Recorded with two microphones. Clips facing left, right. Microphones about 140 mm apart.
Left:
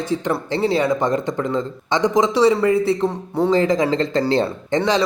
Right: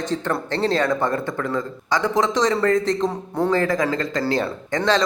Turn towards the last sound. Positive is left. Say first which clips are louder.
# left 4 dB
turn(degrees=25)  # may be behind; listen again after turning